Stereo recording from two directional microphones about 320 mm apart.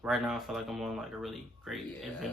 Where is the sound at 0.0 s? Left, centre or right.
Centre.